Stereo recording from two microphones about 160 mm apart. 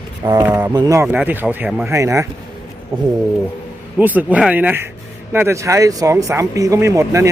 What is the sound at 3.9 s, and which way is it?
Speech, 10° right (ahead or behind).